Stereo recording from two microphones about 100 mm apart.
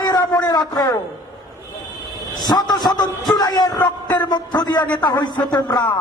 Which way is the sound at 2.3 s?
45° left (ahead or behind).